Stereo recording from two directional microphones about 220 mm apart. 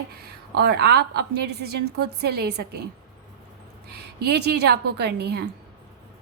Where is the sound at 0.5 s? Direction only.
45° right (ahead or behind).